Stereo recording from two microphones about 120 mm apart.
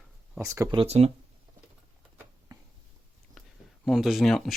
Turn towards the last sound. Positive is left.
turn(degrees=0)  # may be behind; listen again after turning